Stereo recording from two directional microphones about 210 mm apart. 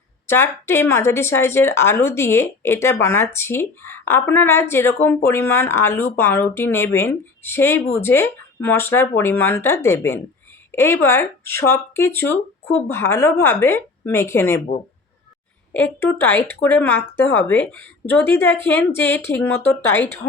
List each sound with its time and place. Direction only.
0.3 s speech: 10° left (ahead or behind)
15.7 s speech: 10° left (ahead or behind)